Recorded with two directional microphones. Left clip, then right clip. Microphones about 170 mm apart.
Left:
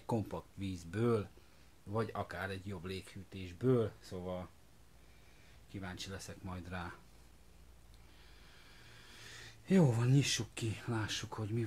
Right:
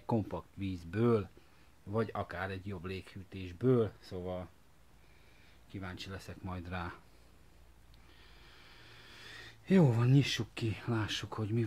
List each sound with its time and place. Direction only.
0.0 s speech: 35° right (ahead or behind)
5.7 s speech: 40° right (ahead or behind)
8.4 s a sound: 40° right (ahead or behind)